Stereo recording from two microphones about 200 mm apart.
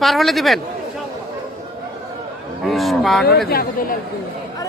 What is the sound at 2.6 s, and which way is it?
Speech, centre (ahead or behind).